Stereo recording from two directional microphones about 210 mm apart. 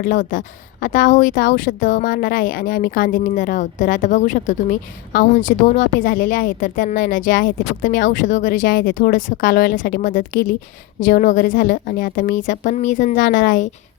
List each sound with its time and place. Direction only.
0.0 s speech: 40° left (ahead or behind)